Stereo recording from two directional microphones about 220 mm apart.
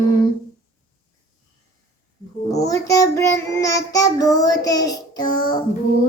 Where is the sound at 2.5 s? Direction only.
15° left (ahead or behind).